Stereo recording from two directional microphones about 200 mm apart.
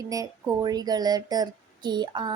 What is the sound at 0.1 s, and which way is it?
Speech, 20° right (ahead or behind).